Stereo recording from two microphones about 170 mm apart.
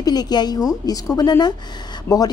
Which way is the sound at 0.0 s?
25° left (ahead or behind).